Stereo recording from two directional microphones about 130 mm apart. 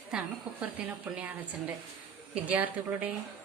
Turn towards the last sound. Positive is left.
turn(degrees=-10)  # may be behind; listen again after turning